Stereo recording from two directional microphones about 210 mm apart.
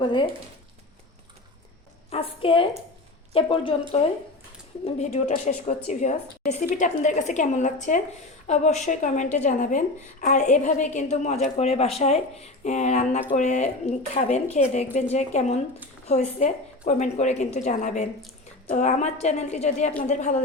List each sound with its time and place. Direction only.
0.0 s a woman's voice: 20° left (ahead or behind)
2.0 s a woman's voice: 25° left (ahead or behind)
4.9 s a woman's voice: 35° left (ahead or behind)